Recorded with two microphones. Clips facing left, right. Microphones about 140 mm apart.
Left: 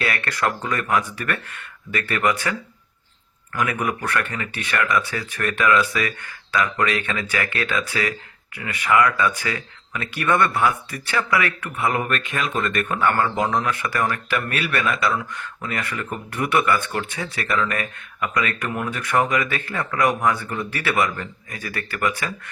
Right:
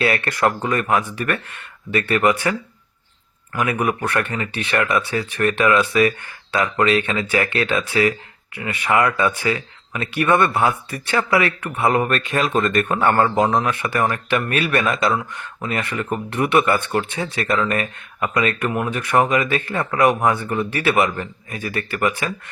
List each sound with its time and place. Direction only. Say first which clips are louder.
0.0 s speech: right 5 dB; 20° right (ahead or behind)